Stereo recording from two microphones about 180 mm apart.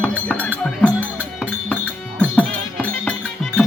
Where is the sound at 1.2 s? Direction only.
5° right (ahead or behind).